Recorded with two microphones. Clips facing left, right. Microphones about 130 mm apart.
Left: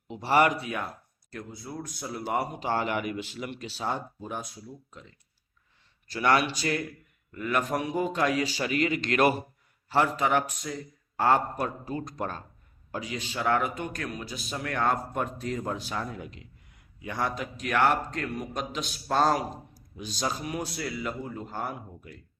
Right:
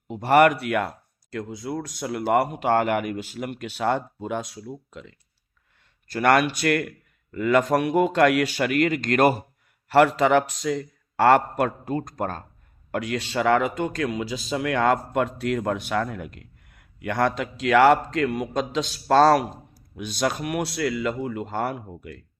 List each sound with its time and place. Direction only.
0.1 s speech: 55° right (ahead or behind); by 5.1 s 90° right
6.1 s a man's voice: 50° right (ahead or behind)
9.9 s speech: 80° right; by 12.4 s 50° right (ahead or behind)
12.9 s speech: 70° right (ahead or behind)